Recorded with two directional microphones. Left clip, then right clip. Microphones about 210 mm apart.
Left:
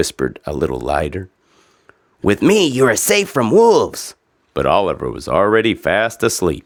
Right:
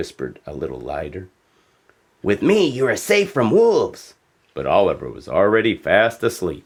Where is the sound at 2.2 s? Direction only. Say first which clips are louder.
Left 3 dB; 45° left (ahead or behind).